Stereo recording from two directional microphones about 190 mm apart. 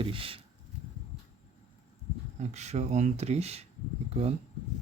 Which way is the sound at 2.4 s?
35° right (ahead or behind).